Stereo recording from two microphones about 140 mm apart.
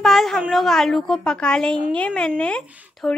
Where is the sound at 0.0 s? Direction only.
Centre (ahead or behind).